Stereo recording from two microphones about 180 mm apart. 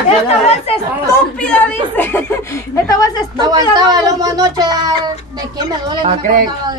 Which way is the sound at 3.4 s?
20° right (ahead or behind).